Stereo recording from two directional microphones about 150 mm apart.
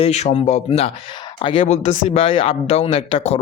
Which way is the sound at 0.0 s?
50° left (ahead or behind).